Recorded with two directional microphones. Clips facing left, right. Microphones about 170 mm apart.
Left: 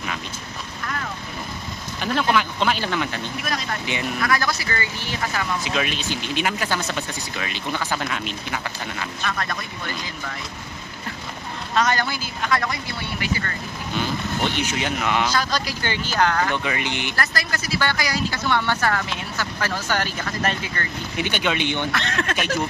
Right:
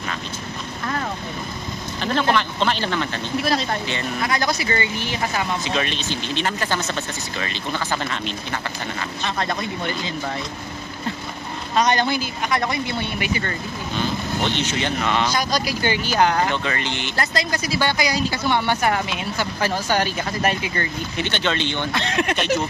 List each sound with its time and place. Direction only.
2.0 s speech: 5° left (ahead or behind)
4.2 s speech: 20° right (ahead or behind)
5.6 s speech: 5° left (ahead or behind)
9.2 s speech: 25° right (ahead or behind)
11.7 s speech: 20° right (ahead or behind)
14.5 s speech: 5° left (ahead or behind)
15.3 s a woman's voice: 15° right (ahead or behind)
16.6 s speech: 10° left (ahead or behind)
17.1 s a woman's voice: 20° right (ahead or behind)
21.2 s speech: 10° left (ahead or behind)
21.9 s speech: 20° right (ahead or behind)